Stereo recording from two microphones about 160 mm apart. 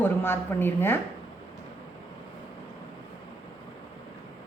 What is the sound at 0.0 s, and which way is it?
Speech, 15° left (ahead or behind).